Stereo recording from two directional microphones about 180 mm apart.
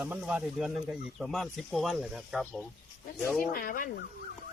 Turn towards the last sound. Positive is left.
turn(degrees=50)  # may be behind; listen again after turning